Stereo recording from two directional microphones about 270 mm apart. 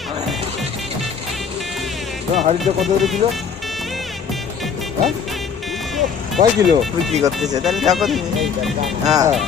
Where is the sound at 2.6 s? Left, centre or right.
Centre.